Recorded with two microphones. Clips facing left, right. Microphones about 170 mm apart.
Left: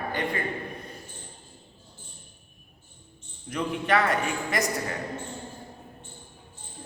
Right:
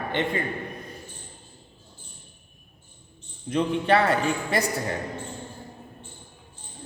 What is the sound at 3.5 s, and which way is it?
A man's voice, 30° right (ahead or behind).